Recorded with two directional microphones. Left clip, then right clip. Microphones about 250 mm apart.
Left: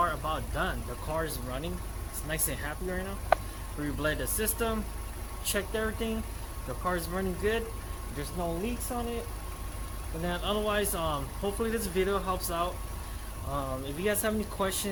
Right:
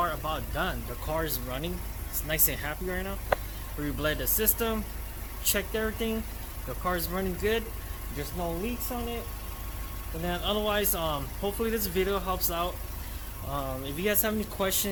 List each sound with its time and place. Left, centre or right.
0.0 s a sound: centre
1.1 s speech: right
10.2 s speech: centre